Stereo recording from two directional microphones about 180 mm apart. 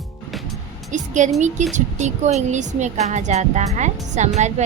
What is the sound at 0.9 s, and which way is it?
A woman's voice, 45° right (ahead or behind).